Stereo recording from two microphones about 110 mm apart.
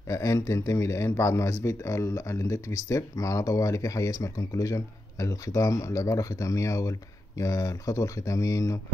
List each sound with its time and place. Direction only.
0.1 s speech: 30° left (ahead or behind)